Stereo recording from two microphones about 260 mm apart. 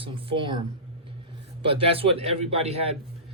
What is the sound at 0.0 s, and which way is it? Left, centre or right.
Speech, right.